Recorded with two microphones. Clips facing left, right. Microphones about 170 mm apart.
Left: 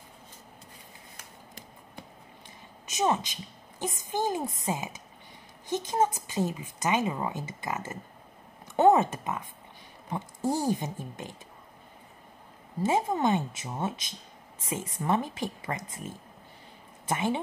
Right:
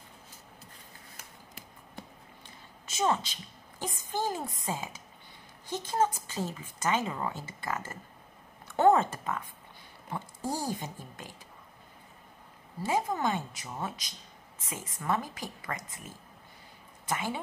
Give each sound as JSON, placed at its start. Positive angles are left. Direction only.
{"t": 1.1, "sound": "scissors", "side_deg": -5}
{"t": 2.9, "sound": "a woman's voice", "side_deg": 15}
{"t": 12.8, "sound": "speech", "side_deg": 20}
{"t": 17.1, "sound": "speech", "side_deg": 20}